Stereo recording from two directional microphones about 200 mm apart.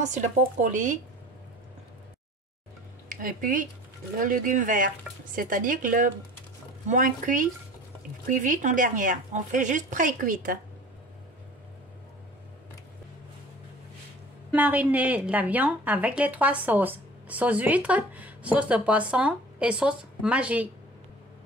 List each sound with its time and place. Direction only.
0.0 s speech: 35° right (ahead or behind)
3.1 s speech: 45° right (ahead or behind)
14.5 s a woman's voice: 10° right (ahead or behind)